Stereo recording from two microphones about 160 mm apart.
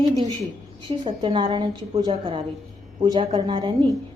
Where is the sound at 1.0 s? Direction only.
30° right (ahead or behind).